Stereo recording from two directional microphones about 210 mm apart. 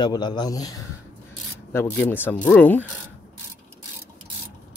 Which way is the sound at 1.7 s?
10° left (ahead or behind).